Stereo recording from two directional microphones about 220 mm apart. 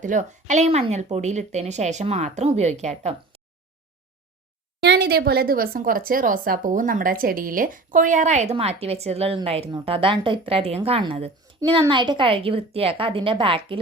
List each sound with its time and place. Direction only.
0.0 s speech: 35° right (ahead or behind)
4.8 s a woman's voice: 50° right (ahead or behind); by 13.7 s 25° right (ahead or behind)